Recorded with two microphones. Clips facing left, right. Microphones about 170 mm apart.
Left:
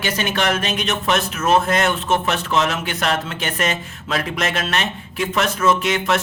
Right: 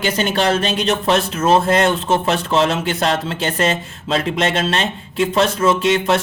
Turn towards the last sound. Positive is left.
turn(degrees=-30)  # may be behind; listen again after turning